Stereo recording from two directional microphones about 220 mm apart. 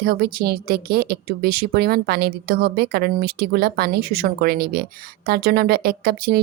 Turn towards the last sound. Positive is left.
turn(degrees=-45)  # may be behind; listen again after turning